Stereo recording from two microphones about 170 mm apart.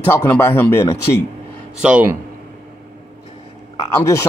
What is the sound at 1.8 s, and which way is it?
Speech, 5° right (ahead or behind).